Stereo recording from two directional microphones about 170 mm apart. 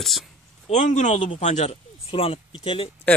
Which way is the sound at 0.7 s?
45° left (ahead or behind).